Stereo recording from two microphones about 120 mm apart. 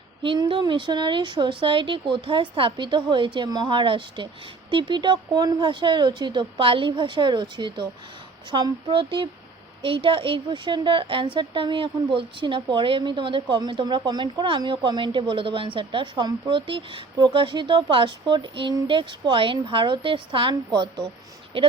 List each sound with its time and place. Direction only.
0.2 s speech: 45° right (ahead or behind)
21.5 s speech: 50° right (ahead or behind)